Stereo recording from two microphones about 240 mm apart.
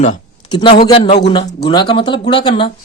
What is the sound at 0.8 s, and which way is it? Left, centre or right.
Speech, left.